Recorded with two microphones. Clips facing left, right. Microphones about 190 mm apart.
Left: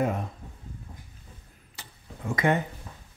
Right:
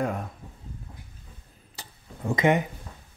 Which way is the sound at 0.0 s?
Centre (ahead or behind).